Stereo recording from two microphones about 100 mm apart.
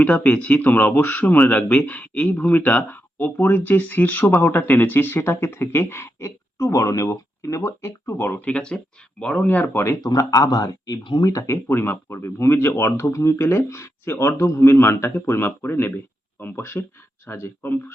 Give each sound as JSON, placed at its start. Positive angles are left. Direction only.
{"t": 0.0, "sound": "a man's voice", "side_deg": 15}
{"t": 10.0, "sound": "speech", "side_deg": 40}